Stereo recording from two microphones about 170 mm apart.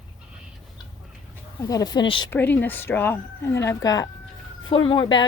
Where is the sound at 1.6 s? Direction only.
20° left (ahead or behind).